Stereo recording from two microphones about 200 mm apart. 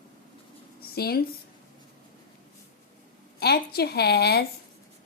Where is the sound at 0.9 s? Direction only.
50° left (ahead or behind).